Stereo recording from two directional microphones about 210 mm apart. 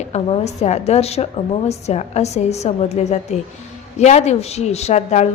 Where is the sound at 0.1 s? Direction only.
30° left (ahead or behind).